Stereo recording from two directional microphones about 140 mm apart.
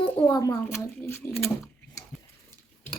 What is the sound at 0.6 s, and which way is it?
Speech, 15° left (ahead or behind).